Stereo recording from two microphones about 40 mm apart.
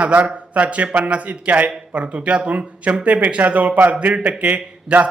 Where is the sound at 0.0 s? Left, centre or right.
Right.